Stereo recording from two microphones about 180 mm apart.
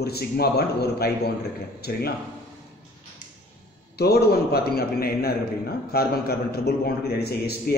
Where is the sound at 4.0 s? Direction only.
60° left (ahead or behind).